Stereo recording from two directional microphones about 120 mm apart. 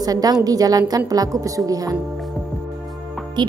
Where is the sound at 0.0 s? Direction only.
30° right (ahead or behind).